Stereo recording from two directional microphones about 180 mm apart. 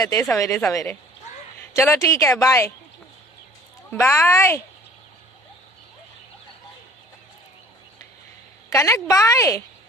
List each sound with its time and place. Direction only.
0.0 s a woman's voice: 20° left (ahead or behind)
3.9 s speech: 15° left (ahead or behind)
8.7 s speech: 15° left (ahead or behind)